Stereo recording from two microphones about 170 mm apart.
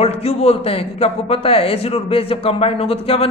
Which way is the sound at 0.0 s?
35° left (ahead or behind).